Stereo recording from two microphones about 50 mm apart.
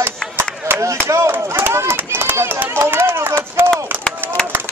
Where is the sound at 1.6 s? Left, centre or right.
Right.